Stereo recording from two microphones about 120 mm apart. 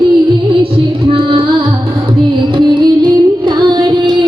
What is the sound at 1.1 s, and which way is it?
Music, 45° right (ahead or behind).